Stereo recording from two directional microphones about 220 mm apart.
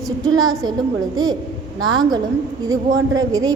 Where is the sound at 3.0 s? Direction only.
15° right (ahead or behind).